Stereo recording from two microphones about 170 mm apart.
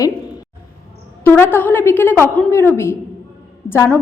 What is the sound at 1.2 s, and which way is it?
A woman's voice, 15° left (ahead or behind).